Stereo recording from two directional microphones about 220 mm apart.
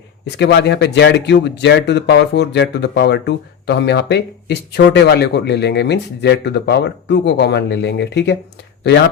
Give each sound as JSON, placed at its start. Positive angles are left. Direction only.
{"t": 0.3, "sound": "speech", "side_deg": 50}